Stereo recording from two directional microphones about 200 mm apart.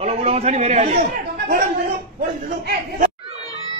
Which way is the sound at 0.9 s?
50° right (ahead or behind).